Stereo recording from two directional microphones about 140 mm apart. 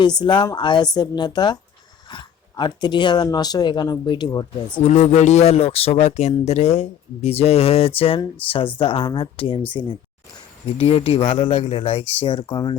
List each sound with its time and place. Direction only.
0.0 s speech: 30° left (ahead or behind)
4.8 s speech: 50° left (ahead or behind); by 9.9 s 30° left (ahead or behind)
10.7 s speech: 45° left (ahead or behind)